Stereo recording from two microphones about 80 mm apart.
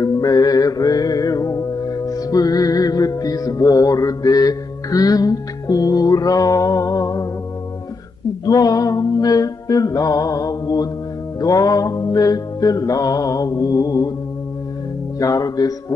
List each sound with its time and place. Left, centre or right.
0.0 s music: left
8.5 s music: left
15.1 s speech: left